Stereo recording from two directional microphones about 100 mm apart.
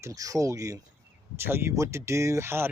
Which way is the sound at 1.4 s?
25° right (ahead or behind).